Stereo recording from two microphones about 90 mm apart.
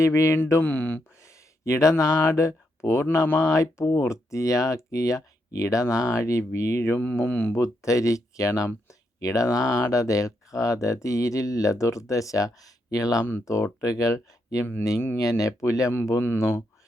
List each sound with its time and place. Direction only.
0.0 s speech: 30° left (ahead or behind)
0.6 s speech: 20° left (ahead or behind)
1.2 s speech: 35° left (ahead or behind)
7.0 s speech: 20° left (ahead or behind)
7.5 s speech: 35° left (ahead or behind)